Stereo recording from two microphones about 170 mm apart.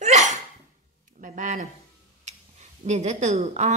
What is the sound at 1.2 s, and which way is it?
Speech, 45° right (ahead or behind).